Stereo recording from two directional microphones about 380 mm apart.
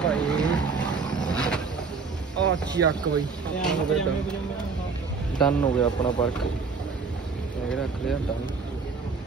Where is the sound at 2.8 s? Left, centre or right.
Right.